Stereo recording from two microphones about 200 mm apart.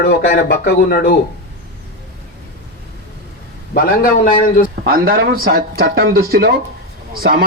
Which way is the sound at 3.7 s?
45° left (ahead or behind).